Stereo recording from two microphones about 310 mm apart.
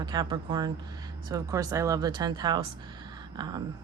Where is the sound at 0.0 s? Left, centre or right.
Centre.